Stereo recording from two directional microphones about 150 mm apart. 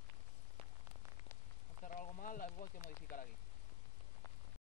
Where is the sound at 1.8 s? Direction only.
60° left (ahead or behind).